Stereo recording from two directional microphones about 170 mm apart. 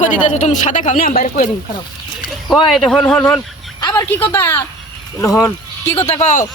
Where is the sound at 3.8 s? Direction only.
20° left (ahead or behind).